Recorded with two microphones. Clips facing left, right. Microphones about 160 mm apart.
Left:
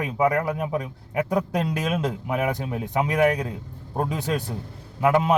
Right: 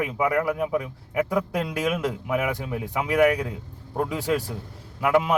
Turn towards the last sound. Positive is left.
turn(degrees=25)  # may be behind; listen again after turning